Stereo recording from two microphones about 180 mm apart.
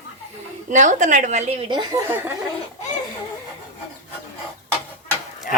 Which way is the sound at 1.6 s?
25° right (ahead or behind).